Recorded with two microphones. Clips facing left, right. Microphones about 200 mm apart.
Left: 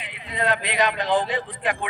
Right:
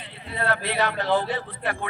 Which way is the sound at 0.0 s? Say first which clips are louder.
Left 3 dB; 15° left (ahead or behind).